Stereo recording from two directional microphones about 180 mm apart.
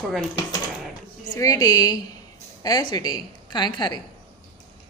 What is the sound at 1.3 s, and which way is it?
A woman's voice, 20° left (ahead or behind).